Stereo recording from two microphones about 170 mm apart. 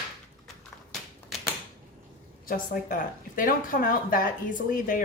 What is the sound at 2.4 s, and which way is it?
Speech, 55° left (ahead or behind).